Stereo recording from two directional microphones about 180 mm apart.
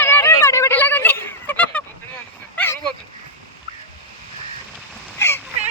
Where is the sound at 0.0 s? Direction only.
15° left (ahead or behind).